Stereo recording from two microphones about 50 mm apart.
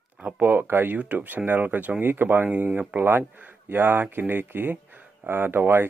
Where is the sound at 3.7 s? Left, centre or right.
Right.